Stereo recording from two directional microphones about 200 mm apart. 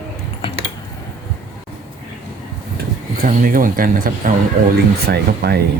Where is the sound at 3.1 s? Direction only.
45° right (ahead or behind).